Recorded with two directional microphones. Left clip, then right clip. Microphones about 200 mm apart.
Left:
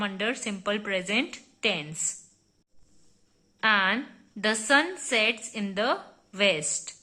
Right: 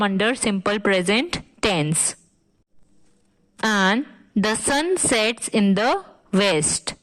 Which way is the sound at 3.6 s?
50° right (ahead or behind).